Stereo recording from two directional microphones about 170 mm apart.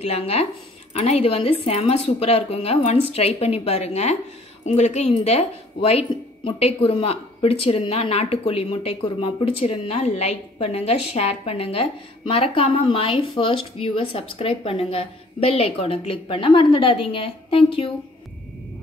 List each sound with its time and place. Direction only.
0.0 s speech: 35° left (ahead or behind)